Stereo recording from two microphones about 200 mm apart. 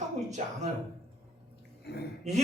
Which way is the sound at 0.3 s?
35° right (ahead or behind).